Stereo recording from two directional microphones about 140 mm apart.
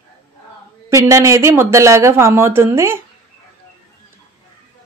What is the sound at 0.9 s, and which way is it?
A woman's voice, 20° right (ahead or behind).